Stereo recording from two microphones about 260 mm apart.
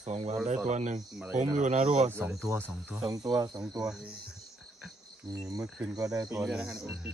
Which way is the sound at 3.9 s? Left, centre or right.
Centre.